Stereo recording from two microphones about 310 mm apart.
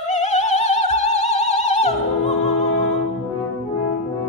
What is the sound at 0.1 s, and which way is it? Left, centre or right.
Opera, left.